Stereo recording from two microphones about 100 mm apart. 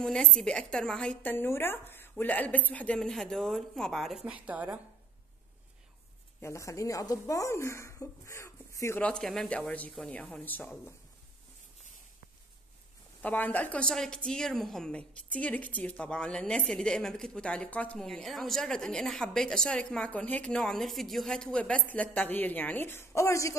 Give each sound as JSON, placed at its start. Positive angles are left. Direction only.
{"t": 0.0, "sound": "a woman's voice", "side_deg": 5}
{"t": 1.2, "sound": "a woman's voice", "side_deg": 20}
{"t": 4.3, "sound": "a woman's voice", "side_deg": -15}
{"t": 6.4, "sound": "speech", "side_deg": 30}
{"t": 9.0, "sound": "a woman's voice", "side_deg": 5}
{"t": 13.2, "sound": "a woman's voice", "side_deg": 15}